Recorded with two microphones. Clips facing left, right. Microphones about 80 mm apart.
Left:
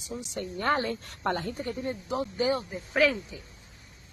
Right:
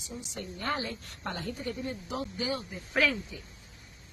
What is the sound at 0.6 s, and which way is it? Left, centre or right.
Speech, left.